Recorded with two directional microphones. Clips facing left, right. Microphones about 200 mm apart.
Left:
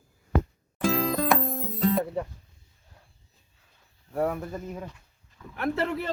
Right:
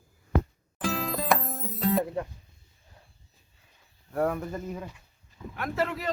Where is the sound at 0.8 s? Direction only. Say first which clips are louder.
Left 5 dB; centre (ahead or behind).